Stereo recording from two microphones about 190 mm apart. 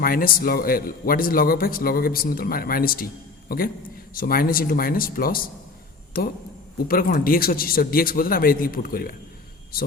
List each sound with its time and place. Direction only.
0.0 s speech: 50° left (ahead or behind)